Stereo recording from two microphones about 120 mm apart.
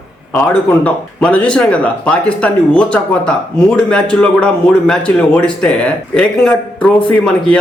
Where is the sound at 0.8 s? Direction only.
10° left (ahead or behind).